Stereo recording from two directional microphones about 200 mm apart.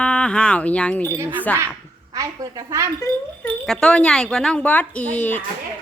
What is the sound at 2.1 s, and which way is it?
Speech, 15° right (ahead or behind).